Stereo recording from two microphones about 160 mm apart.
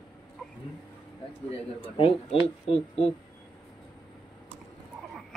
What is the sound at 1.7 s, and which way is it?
Speech, 35° left (ahead or behind).